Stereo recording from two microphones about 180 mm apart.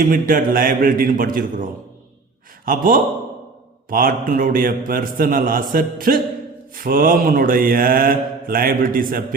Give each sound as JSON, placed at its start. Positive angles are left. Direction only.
{"t": 0.0, "sound": "mantra", "side_deg": -50}
{"t": 2.6, "sound": "mantra", "side_deg": -50}